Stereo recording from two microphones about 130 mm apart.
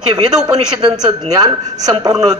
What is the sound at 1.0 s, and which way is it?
A woman's voice, 30° right (ahead or behind).